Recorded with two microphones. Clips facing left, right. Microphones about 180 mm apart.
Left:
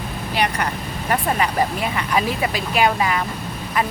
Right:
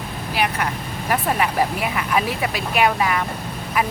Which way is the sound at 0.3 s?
5° right (ahead or behind).